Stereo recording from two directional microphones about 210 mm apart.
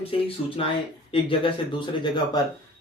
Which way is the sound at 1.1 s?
25° left (ahead or behind).